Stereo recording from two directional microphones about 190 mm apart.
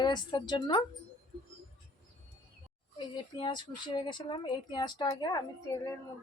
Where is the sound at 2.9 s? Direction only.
25° left (ahead or behind).